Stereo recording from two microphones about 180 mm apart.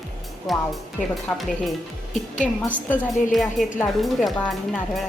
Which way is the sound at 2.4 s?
5° left (ahead or behind).